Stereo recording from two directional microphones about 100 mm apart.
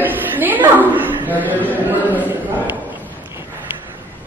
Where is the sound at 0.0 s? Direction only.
20° right (ahead or behind).